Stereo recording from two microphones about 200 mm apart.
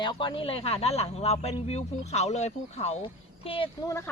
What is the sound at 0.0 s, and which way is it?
Speech, 20° left (ahead or behind).